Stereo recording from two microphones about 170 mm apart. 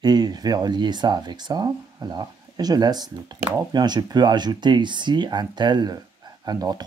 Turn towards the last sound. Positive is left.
turn(degrees=-25)  # may be behind; listen again after turning